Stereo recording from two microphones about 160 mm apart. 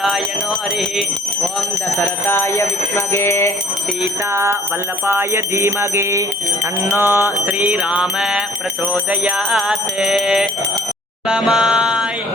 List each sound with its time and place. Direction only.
2.0 s speech: 15° left (ahead or behind)
4.3 s music: 15° right (ahead or behind)